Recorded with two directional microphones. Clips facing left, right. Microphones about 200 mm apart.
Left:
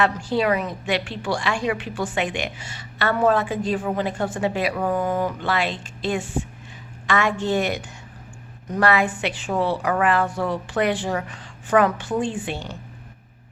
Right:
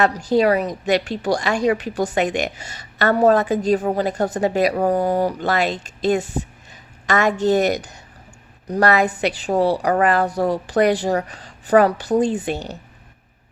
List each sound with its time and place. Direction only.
0.0 s a woman's voice: 40° right (ahead or behind)